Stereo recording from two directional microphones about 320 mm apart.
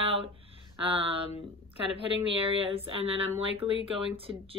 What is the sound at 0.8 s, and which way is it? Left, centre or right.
Speech, centre.